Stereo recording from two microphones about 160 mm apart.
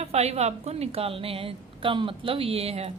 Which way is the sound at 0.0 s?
40° right (ahead or behind).